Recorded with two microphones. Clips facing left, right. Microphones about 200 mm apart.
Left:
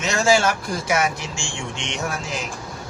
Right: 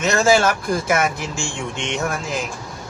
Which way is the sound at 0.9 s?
50° right (ahead or behind).